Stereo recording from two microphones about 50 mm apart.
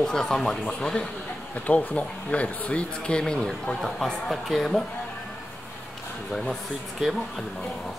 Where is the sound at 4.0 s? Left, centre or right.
Centre.